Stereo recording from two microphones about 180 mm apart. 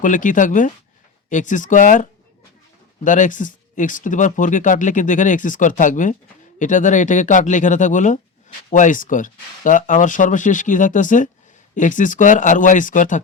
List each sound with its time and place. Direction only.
0.0 s speech: 45° left (ahead or behind)